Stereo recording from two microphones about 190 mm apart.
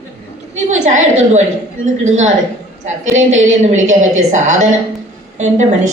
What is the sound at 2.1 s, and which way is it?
A woman's voice, 40° right (ahead or behind).